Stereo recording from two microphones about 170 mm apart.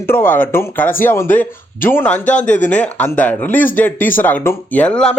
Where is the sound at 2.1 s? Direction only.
45° left (ahead or behind).